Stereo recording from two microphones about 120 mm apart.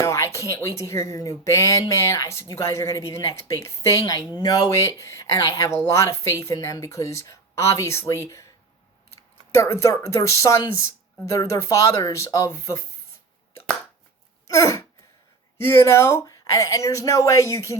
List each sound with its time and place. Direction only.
0.0 s a woman's voice: 25° left (ahead or behind)
9.6 s a woman's voice: 25° left (ahead or behind)
14.4 s a sound: 25° left (ahead or behind)
15.5 s a woman's voice: 20° left (ahead or behind)